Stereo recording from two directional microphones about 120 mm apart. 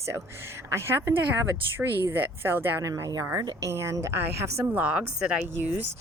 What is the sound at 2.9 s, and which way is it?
A woman's voice, 30° right (ahead or behind).